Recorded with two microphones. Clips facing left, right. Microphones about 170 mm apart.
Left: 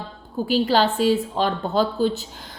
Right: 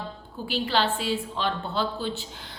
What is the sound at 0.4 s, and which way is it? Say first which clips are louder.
A woman's voice: left 6 dB; 40° left (ahead or behind).